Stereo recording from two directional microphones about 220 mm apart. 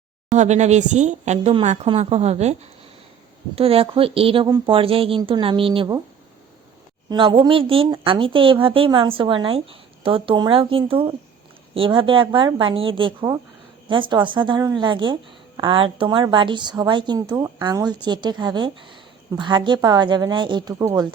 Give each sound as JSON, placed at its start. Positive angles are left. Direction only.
{"t": 0.3, "sound": "a woman's voice", "side_deg": -30}
{"t": 7.1, "sound": "a woman's voice", "side_deg": -20}